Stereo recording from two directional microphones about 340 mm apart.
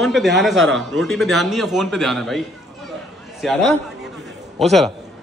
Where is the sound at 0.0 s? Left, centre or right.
Centre.